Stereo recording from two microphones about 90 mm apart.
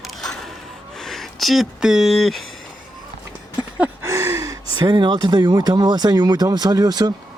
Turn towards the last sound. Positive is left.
turn(degrees=-50)  # may be behind; listen again after turning